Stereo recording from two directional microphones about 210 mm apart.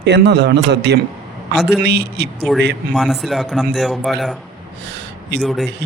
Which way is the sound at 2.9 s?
Centre (ahead or behind).